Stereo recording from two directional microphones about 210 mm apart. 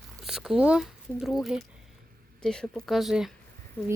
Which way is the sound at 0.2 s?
Centre (ahead or behind).